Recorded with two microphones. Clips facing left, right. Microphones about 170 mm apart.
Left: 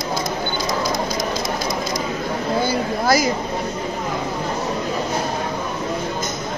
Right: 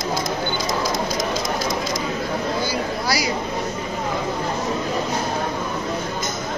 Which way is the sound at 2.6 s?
50° left (ahead or behind).